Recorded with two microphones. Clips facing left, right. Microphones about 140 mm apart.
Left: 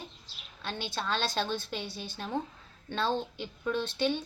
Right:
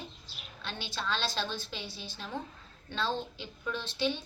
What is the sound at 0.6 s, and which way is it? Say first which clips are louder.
A woman's voice: left 2 dB; 50° left (ahead or behind).